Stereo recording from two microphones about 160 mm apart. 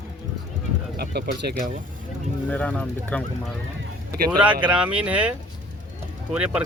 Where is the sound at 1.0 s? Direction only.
85° right.